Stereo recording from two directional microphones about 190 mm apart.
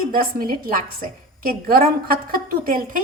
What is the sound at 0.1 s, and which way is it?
A woman's voice, 50° right (ahead or behind).